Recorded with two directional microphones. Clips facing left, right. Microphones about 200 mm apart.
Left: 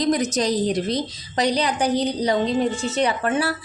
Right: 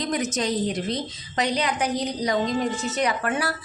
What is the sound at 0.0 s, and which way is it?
A woman's voice, 35° left (ahead or behind).